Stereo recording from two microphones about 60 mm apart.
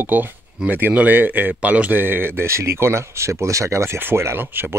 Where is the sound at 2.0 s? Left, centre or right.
Right.